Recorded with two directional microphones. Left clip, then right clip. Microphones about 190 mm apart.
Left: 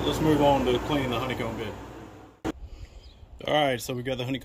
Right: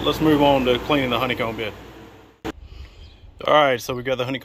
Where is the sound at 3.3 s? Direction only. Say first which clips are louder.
Right 8 dB; 5° left (ahead or behind).